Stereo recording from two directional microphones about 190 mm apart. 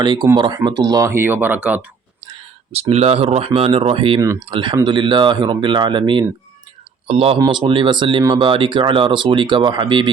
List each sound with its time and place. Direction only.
0.0 s speech: 20° right (ahead or behind)
2.7 s speech: 35° right (ahead or behind)